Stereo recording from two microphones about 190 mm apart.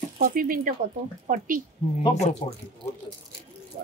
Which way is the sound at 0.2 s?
50° right (ahead or behind).